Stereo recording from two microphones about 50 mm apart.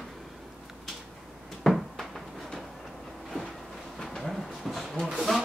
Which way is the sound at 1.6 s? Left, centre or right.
Centre.